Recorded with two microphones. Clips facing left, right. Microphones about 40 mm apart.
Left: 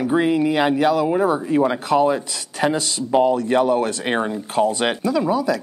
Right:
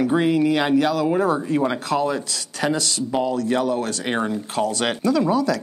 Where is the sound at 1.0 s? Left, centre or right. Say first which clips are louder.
Left 1 dB; centre.